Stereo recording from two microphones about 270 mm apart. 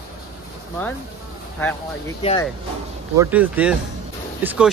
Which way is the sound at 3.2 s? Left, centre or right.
Centre.